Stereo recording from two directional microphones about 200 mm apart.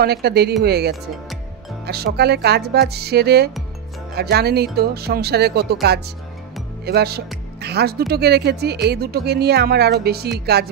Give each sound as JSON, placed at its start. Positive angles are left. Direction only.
{"t": 0.0, "sound": "speech", "side_deg": -55}